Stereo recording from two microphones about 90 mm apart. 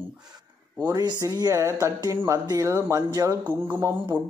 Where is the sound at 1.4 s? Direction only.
35° right (ahead or behind).